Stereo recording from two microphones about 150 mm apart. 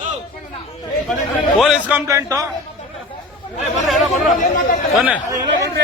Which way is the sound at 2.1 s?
20° right (ahead or behind).